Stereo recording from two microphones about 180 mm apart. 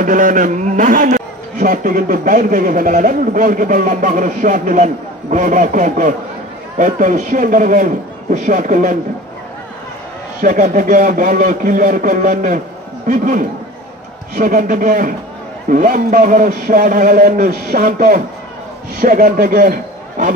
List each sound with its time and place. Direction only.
0.0 s a man's voice: 45° right (ahead or behind)
10.4 s a man's voice: 50° right (ahead or behind)